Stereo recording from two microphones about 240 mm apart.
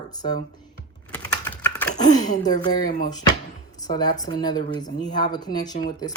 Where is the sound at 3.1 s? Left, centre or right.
Centre.